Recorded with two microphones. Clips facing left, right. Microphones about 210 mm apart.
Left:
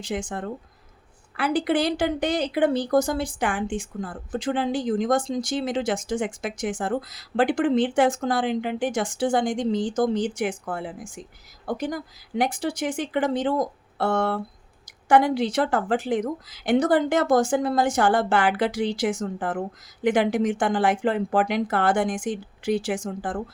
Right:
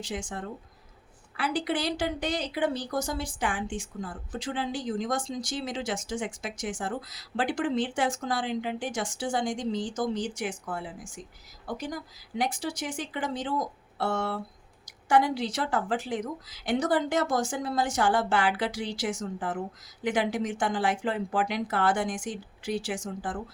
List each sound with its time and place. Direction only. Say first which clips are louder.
0.0 s a woman's voice: left 6 dB; 55° left (ahead or behind)